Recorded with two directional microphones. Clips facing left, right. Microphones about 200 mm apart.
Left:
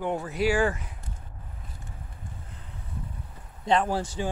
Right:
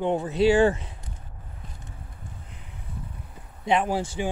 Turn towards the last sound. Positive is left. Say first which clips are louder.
# right 2 dB
turn(degrees=-10)  # may be behind; listen again after turning